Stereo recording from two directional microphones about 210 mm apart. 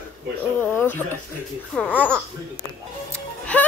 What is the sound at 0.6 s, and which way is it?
Speech, 10° left (ahead or behind).